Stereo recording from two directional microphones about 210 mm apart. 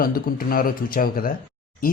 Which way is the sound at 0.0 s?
45° left (ahead or behind).